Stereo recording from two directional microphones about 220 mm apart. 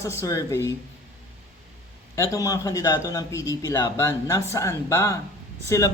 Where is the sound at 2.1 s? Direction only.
15° left (ahead or behind).